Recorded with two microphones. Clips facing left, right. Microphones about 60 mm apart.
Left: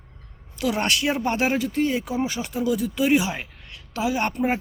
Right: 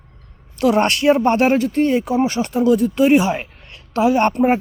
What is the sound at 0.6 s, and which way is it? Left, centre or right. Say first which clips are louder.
Speech: right 9 dB; right.